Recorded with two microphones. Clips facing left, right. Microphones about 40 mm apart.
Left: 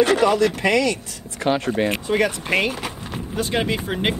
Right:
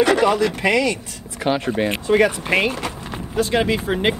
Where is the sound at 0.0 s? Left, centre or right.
Centre.